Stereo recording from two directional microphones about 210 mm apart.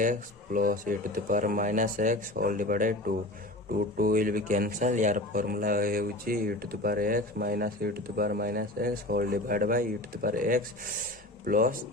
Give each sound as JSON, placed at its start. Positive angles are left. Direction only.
{"t": 0.0, "sound": "speech", "side_deg": -40}
{"t": 3.9, "sound": "speech", "side_deg": -40}